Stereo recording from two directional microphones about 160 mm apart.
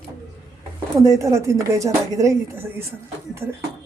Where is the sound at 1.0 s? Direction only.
20° right (ahead or behind).